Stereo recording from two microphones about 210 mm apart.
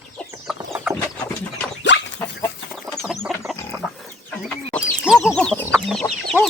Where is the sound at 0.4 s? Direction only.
5° right (ahead or behind).